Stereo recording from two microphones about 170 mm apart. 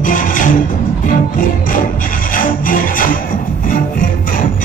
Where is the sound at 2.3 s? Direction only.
55° left (ahead or behind).